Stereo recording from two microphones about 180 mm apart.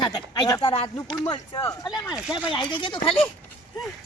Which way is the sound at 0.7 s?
35° left (ahead or behind).